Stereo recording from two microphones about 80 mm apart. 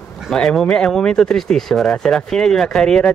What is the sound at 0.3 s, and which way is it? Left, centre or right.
Speech, centre.